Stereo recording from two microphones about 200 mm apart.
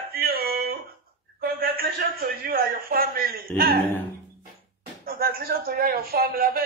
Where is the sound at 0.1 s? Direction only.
50° right (ahead or behind).